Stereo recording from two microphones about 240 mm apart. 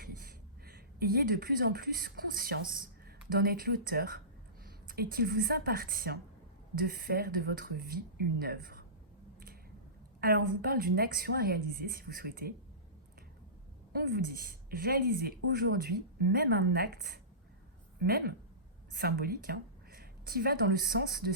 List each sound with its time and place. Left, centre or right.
0.0 s a woman's voice: right
10.2 s a woman's voice: right
13.9 s a woman's voice: right